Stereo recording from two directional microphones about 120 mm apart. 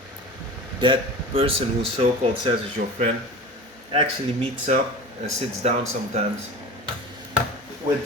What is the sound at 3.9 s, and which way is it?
Speech, 55° right (ahead or behind).